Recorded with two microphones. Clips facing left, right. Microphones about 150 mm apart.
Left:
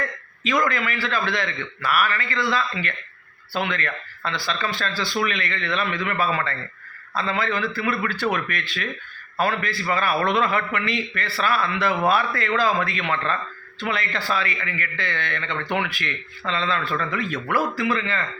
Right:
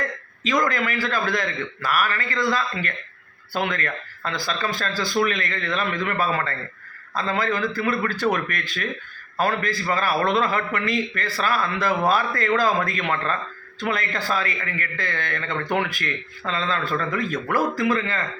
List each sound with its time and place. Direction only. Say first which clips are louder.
0.4 s a man's voice: even; 40° right (ahead or behind)